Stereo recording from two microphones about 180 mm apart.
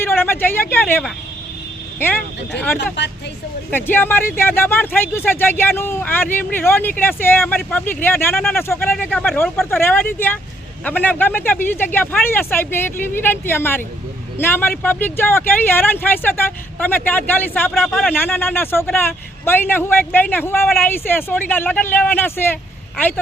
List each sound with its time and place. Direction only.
0.0 s a man's voice: 10° left (ahead or behind)
2.7 s speech: 70° left (ahead or behind)
3.7 s a man's voice: 10° left (ahead or behind)
17.7 s speech: centre (ahead or behind)
18.1 s a man's voice: 10° left (ahead or behind)